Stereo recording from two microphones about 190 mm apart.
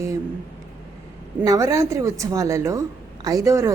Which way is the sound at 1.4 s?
15° right (ahead or behind).